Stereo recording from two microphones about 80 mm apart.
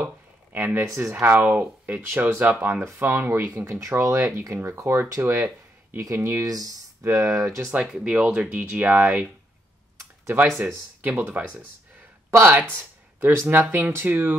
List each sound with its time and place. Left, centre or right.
0.0 s a sound: right
0.7 s speech: right
1.2 s speech: right
2.8 s speech: right
6.4 s speech: right
7.8 s speech: centre
9.9 s computer keyboard: right
10.6 s speech: right
12.3 s speech: right